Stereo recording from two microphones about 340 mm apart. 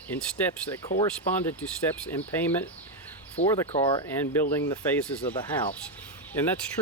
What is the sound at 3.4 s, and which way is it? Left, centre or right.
Speech, centre.